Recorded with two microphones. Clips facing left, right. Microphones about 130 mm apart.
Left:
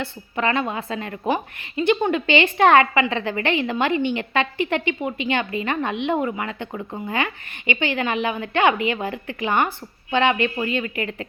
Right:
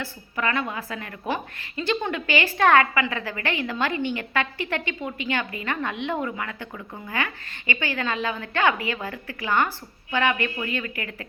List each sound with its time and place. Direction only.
0.0 s a woman's voice: 25° left (ahead or behind)